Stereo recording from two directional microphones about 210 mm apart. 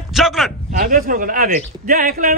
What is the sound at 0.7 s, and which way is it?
A man's voice, 40° right (ahead or behind).